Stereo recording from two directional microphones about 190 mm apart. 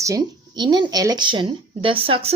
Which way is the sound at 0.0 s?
20° right (ahead or behind).